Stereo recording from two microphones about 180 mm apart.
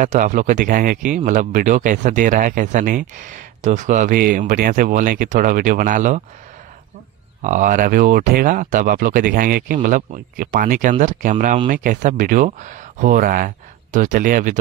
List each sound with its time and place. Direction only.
0.0 s speech: 45° right (ahead or behind)
7.4 s speech: 45° right (ahead or behind)